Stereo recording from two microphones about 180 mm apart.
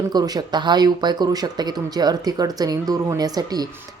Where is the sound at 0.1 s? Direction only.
20° right (ahead or behind).